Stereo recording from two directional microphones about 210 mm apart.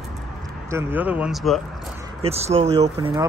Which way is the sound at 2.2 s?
30° right (ahead or behind).